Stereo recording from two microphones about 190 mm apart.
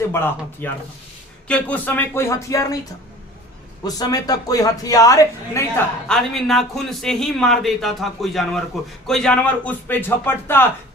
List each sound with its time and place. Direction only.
0.1 s speech: 10° left (ahead or behind)
3.8 s a man's voice: 20° left (ahead or behind)
6.1 s a man's voice: centre (ahead or behind)